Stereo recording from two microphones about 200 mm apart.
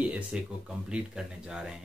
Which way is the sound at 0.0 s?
5° right (ahead or behind).